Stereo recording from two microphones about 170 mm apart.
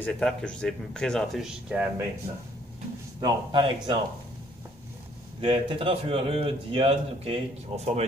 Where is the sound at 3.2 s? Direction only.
25° right (ahead or behind).